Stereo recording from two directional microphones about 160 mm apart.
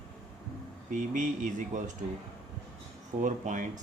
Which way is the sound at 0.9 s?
55° right (ahead or behind).